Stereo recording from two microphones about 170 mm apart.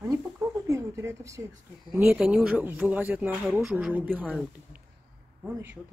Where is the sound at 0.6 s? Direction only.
15° right (ahead or behind).